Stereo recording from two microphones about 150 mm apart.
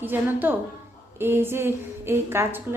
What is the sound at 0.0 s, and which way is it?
Speech, 15° right (ahead or behind).